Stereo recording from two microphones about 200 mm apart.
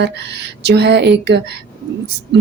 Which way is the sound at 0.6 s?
55° right (ahead or behind).